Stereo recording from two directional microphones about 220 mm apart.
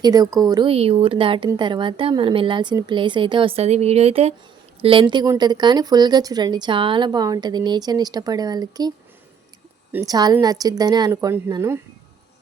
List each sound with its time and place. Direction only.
0.0 s speech: 15° right (ahead or behind)
9.9 s a woman's voice: 15° right (ahead or behind)